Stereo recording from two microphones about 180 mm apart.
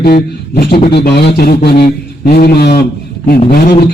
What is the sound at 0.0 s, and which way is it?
A man's voice, 60° left (ahead or behind).